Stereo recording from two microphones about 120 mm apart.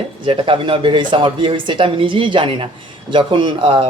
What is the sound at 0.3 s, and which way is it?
Speech, 45° right (ahead or behind).